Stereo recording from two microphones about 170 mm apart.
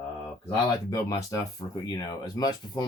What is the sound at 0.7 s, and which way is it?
Speech, 20° left (ahead or behind).